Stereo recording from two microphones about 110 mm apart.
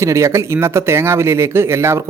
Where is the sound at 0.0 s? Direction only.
25° right (ahead or behind).